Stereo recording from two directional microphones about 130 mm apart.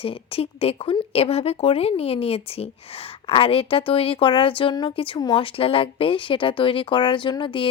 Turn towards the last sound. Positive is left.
turn(degrees=40)  # may be behind; listen again after turning